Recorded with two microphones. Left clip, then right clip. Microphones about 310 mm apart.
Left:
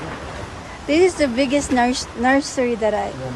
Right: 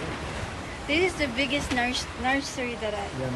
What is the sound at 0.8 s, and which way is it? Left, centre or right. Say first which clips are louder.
Speech: left 9 dB; centre.